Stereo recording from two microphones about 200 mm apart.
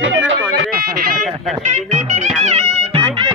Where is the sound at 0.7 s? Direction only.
50° right (ahead or behind); by 3.2 s 30° right (ahead or behind).